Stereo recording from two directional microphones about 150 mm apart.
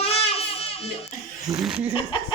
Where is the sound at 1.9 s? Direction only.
35° left (ahead or behind).